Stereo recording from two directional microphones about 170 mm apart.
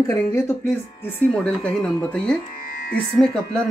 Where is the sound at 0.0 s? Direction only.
20° left (ahead or behind).